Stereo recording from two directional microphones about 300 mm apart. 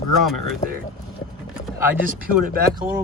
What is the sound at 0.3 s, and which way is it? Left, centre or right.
Speech, centre.